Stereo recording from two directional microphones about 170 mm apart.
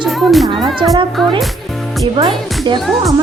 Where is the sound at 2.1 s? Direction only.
25° right (ahead or behind).